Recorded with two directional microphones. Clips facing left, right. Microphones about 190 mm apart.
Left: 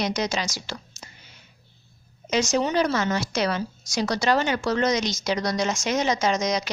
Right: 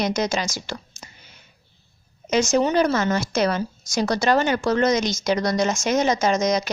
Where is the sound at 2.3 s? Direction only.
50° right (ahead or behind).